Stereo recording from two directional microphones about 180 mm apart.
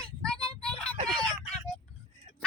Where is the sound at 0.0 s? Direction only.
5° left (ahead or behind).